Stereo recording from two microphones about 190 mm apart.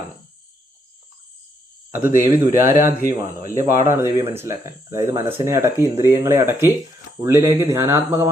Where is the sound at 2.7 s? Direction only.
45° left (ahead or behind).